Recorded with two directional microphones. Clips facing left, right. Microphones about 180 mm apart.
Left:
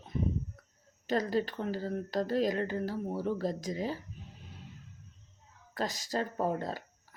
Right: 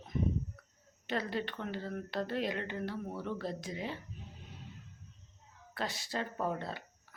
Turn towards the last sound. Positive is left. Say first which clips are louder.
# left 4 dB
turn(degrees=40)  # may be behind; listen again after turning